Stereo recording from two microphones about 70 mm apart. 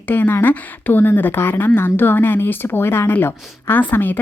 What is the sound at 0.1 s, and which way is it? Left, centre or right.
A woman's voice, left.